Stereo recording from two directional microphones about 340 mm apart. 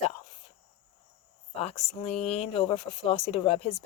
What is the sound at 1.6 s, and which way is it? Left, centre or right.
A woman's voice, centre.